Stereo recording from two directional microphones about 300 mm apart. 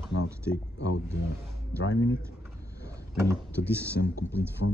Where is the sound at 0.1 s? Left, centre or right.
Left.